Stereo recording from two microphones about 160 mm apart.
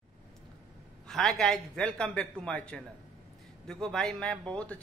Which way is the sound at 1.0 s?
Centre (ahead or behind).